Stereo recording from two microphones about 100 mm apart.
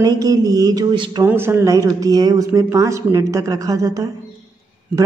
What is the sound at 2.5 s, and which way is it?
A woman's voice, 30° right (ahead or behind).